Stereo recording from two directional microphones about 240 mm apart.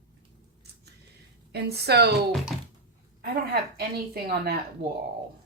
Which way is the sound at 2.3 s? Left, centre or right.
Centre.